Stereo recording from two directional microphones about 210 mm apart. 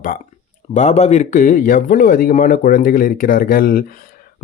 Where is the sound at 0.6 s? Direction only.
30° left (ahead or behind).